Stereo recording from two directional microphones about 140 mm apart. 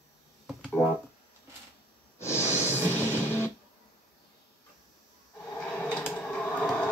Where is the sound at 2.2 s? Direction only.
20° left (ahead or behind).